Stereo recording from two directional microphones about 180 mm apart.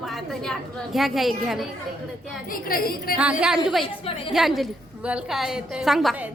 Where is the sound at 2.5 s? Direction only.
55° left (ahead or behind).